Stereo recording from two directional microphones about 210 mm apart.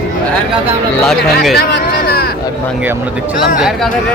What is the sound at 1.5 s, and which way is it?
Speech, 50° left (ahead or behind).